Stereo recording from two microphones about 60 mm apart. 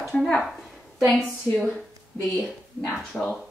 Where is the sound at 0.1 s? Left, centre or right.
Centre.